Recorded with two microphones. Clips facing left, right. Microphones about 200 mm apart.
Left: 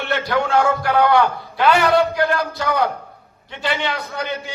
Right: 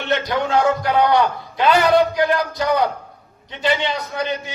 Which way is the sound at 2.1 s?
20° right (ahead or behind).